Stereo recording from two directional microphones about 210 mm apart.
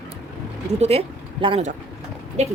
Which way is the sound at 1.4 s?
25° right (ahead or behind).